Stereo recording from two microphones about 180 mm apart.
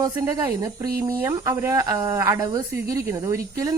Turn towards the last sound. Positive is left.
turn(degrees=-20)  # may be behind; listen again after turning